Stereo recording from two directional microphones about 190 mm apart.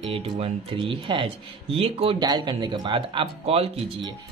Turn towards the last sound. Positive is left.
turn(degrees=-30)  # may be behind; listen again after turning